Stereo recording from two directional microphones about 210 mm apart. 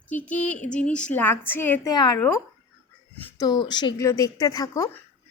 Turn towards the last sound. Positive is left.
turn(degrees=15)  # may be behind; listen again after turning